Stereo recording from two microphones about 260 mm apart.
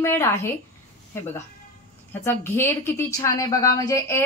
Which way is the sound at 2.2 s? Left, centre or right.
Centre.